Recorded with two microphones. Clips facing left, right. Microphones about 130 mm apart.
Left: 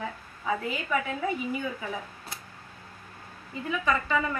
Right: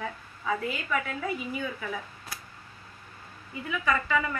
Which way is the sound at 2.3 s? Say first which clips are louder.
Right 2 dB; 25° left (ahead or behind).